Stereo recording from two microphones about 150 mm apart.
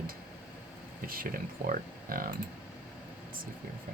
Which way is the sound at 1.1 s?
70° right (ahead or behind).